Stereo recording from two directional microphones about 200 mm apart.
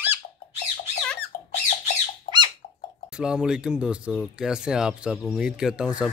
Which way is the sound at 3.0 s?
5° right (ahead or behind).